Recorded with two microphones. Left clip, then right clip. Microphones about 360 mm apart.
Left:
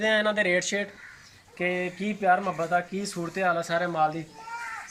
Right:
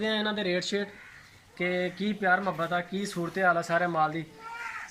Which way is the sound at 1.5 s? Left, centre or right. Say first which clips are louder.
Left 1 dB; centre.